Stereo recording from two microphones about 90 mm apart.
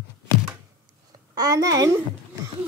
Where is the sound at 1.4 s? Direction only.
45° right (ahead or behind).